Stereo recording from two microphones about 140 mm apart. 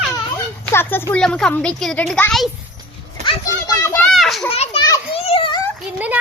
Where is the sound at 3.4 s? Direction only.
25° left (ahead or behind).